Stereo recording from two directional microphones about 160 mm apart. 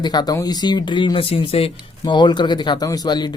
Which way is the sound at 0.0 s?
25° left (ahead or behind).